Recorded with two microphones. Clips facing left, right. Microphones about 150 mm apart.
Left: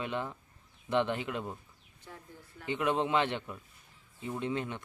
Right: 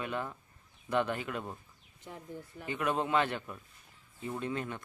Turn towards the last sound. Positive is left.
turn(degrees=20)  # may be behind; listen again after turning